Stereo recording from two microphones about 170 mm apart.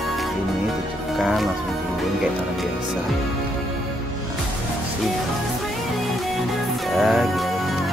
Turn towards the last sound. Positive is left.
turn(degrees=0)  # may be behind; listen again after turning